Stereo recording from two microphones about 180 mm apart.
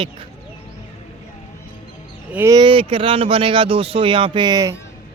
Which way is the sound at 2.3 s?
15° right (ahead or behind).